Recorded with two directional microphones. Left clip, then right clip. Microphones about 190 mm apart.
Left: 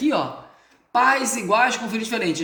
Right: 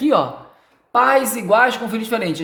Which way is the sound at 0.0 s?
65° right (ahead or behind).